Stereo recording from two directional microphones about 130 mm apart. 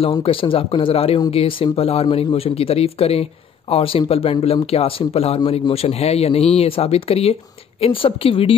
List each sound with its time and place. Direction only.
0.2 s speech: 45° left (ahead or behind)